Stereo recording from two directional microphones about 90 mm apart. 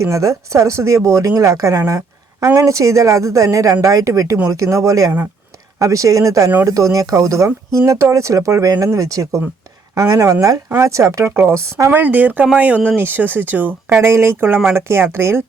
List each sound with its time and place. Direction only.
0.0 s speech: 35° right (ahead or behind)
11.9 s speech: 20° right (ahead or behind)